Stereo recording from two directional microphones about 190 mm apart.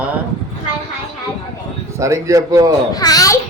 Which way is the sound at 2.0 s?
15° right (ahead or behind).